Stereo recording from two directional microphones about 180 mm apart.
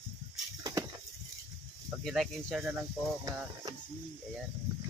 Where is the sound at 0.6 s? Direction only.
20° right (ahead or behind).